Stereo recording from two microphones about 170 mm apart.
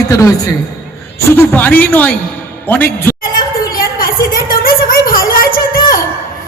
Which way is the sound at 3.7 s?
55° left (ahead or behind).